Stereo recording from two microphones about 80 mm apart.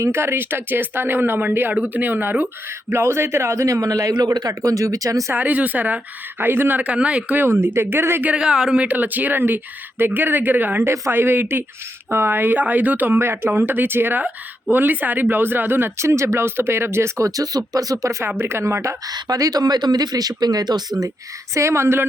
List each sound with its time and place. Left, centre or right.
0.0 s speech: right
2.9 s speech: right
5.3 s speech: right
8.3 s speech: centre; by 19.1 s right
19.1 s speech: right
21.5 s speech: right